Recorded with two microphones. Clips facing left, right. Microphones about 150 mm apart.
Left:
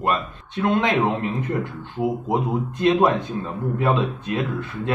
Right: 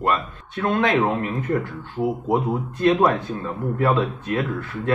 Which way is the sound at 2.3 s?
20° left (ahead or behind).